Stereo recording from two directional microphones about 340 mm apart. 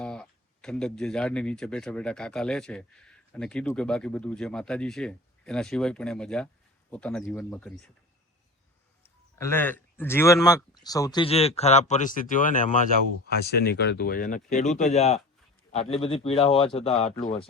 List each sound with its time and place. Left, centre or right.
0.0 s speech: centre
9.0 s speech: centre